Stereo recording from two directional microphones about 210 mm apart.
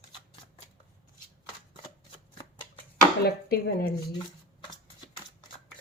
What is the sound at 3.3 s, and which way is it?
Speech, 50° left (ahead or behind).